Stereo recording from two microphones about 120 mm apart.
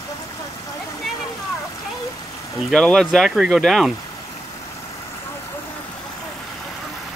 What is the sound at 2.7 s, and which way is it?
Speech, centre (ahead or behind).